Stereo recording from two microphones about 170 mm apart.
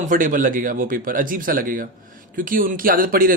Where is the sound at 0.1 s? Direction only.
50° right (ahead or behind).